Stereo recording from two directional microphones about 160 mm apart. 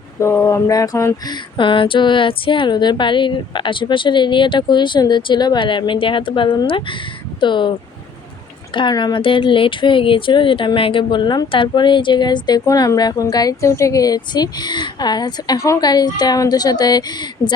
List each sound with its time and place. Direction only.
0.2 s speech: 15° left (ahead or behind)
1.5 s speech: 30° left (ahead or behind)
8.7 s speech: 30° left (ahead or behind)